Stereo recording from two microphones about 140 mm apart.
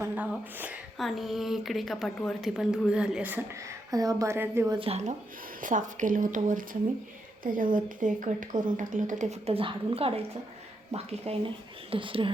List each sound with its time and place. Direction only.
0.0 s speech: 10° right (ahead or behind)
0.9 s a woman's voice: centre (ahead or behind)
3.9 s a woman's voice: 25° right (ahead or behind)
4.7 s a woman's voice: 40° right (ahead or behind)
5.5 s speech: 65° right (ahead or behind)
9.5 s a woman's voice: 40° right (ahead or behind)